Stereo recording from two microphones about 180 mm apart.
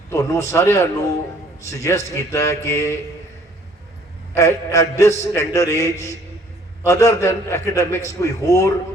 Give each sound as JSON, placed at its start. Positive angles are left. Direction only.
{"t": 0.1, "sound": "a man's voice", "side_deg": 15}
{"t": 4.4, "sound": "a man's voice", "side_deg": 15}